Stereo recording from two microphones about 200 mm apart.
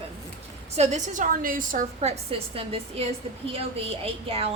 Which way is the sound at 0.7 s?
35° right (ahead or behind).